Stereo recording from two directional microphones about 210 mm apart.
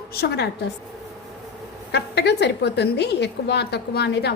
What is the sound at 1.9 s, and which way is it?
A woman's voice, 55° left (ahead or behind).